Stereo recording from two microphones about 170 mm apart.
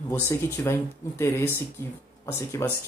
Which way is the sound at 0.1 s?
15° left (ahead or behind).